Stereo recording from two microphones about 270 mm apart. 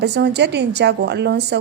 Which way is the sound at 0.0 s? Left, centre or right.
Right.